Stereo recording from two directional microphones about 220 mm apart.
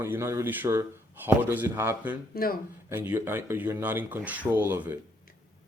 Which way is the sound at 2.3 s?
40° left (ahead or behind).